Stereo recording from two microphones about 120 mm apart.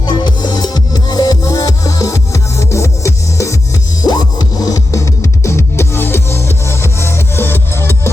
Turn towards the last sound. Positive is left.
turn(degrees=20)  # may be behind; listen again after turning